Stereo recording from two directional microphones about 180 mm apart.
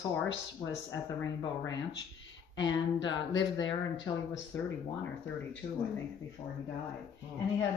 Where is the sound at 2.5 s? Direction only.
25° left (ahead or behind).